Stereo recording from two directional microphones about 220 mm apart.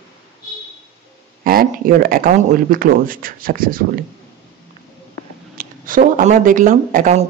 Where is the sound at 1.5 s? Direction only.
40° right (ahead or behind).